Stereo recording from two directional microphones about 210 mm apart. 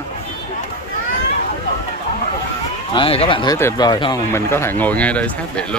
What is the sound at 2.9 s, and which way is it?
Speech, 25° left (ahead or behind).